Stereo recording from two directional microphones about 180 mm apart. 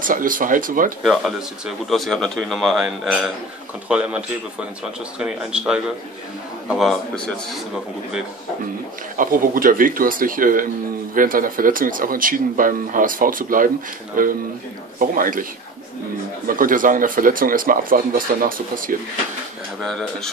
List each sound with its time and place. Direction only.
0.0 s speech: 50° right (ahead or behind)
1.9 s a man's voice: centre (ahead or behind)
9.1 s speech: 50° right (ahead or behind)
16.4 s speech: 50° right (ahead or behind)
19.8 s a man's voice: 5° left (ahead or behind)